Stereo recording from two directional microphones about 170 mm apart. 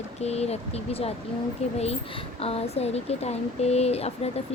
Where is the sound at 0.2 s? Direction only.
40° left (ahead or behind).